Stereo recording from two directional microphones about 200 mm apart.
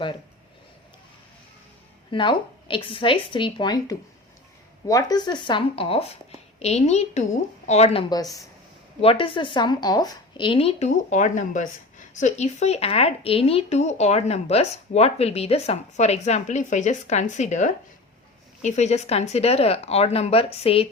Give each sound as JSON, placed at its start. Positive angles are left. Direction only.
{"t": 2.1, "sound": "speech", "side_deg": 25}
{"t": 8.1, "sound": "speech", "side_deg": 20}